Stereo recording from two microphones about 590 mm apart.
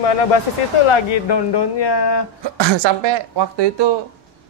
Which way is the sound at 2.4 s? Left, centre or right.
Right.